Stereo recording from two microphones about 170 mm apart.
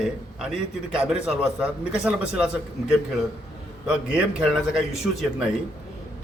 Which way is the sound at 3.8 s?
5° right (ahead or behind).